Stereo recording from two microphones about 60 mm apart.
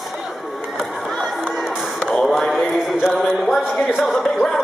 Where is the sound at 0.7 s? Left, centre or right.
Centre.